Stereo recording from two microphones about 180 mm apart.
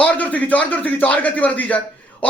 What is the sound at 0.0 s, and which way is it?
A man's voice, 10° left (ahead or behind).